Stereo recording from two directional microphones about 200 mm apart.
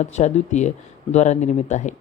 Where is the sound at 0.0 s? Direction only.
35° left (ahead or behind).